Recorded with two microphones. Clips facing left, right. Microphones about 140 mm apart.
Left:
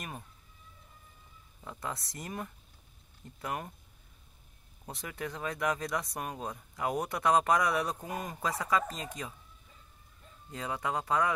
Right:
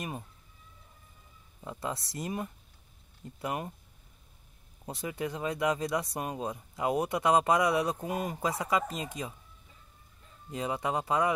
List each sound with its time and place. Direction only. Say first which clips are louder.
1.8 s speech: right 4 dB; 20° right (ahead or behind)
4.8 s speech: right 5 dB; 15° right (ahead or behind)
10.5 s speech: right 3 dB; 20° right (ahead or behind)